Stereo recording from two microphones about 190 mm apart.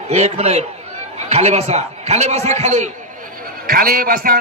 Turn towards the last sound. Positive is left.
turn(degrees=-50)  # may be behind; listen again after turning